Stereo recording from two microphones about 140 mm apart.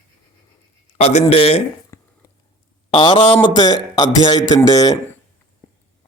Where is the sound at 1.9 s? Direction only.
20° left (ahead or behind).